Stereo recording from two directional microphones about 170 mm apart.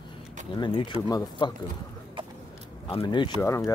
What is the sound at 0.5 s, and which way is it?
Speech, 25° left (ahead or behind).